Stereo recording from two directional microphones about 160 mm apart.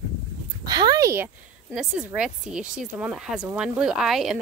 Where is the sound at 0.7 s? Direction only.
25° right (ahead or behind).